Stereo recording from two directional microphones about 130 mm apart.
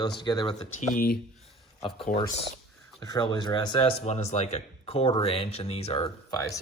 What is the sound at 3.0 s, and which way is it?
Speech, 30° left (ahead or behind).